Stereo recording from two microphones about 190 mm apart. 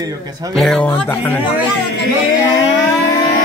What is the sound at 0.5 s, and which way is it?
Music, 5° left (ahead or behind).